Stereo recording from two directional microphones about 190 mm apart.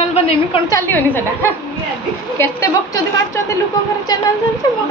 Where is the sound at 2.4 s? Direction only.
15° left (ahead or behind).